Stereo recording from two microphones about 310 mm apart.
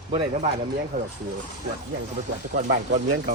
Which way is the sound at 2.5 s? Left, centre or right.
Right.